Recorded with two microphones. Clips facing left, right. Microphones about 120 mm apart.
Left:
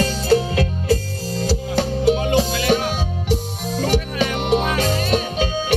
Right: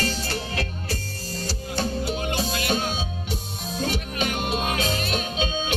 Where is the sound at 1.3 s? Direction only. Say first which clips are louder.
Left 8 dB; 90° left.